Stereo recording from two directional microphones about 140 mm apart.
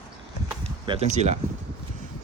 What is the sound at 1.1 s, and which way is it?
Speech, 50° right (ahead or behind).